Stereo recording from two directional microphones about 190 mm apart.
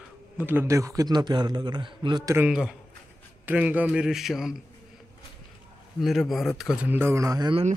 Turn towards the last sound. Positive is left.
turn(degrees=-25)  # may be behind; listen again after turning